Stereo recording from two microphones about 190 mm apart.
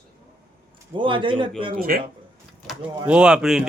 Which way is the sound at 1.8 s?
50° right (ahead or behind).